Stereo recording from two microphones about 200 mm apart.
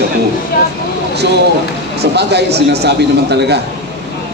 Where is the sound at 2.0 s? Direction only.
55° right (ahead or behind).